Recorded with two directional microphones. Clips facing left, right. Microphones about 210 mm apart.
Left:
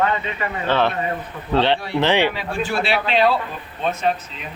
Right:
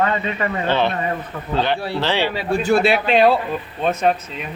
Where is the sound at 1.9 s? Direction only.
15° left (ahead or behind).